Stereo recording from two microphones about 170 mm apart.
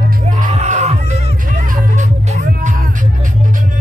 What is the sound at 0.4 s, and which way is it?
Music, 45° right (ahead or behind).